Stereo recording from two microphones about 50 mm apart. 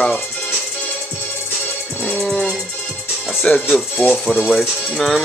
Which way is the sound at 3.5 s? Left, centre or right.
Left.